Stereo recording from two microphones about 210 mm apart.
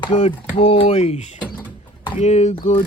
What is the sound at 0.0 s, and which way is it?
Speech, 25° left (ahead or behind).